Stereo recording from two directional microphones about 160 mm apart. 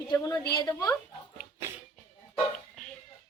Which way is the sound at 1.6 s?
15° right (ahead or behind).